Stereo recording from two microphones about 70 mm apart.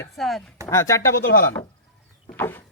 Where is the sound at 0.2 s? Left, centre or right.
Centre.